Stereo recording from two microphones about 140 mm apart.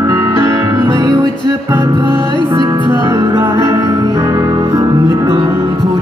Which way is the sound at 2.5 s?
35° right (ahead or behind).